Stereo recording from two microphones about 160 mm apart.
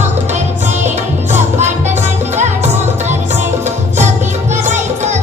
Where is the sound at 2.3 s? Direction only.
45° right (ahead or behind).